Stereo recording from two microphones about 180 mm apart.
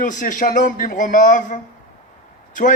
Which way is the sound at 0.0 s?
45° left (ahead or behind).